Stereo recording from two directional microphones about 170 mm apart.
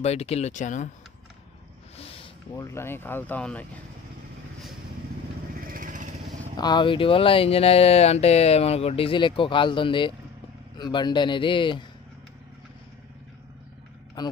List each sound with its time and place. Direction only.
0.0 s speech: 40° left (ahead or behind)
2.0 s a sound: 35° left (ahead or behind)
2.5 s speech: 15° left (ahead or behind)
5.6 s vehicle: 55° right (ahead or behind)
6.5 s speech: 25° left (ahead or behind)
14.2 s speech: 25° left (ahead or behind)